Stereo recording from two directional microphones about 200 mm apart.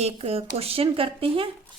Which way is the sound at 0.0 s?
30° right (ahead or behind).